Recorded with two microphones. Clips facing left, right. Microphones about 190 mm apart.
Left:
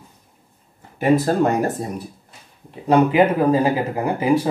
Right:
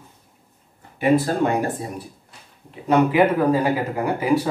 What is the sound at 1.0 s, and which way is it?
Speech, 40° left (ahead or behind).